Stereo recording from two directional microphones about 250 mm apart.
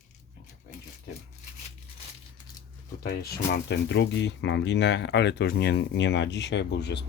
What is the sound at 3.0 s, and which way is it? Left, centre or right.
Speech, left.